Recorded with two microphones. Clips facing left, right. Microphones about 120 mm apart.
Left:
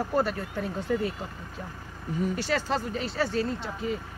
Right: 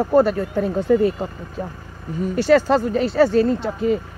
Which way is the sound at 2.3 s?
60° right (ahead or behind).